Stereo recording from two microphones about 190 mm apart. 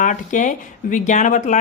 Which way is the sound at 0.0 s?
40° left (ahead or behind).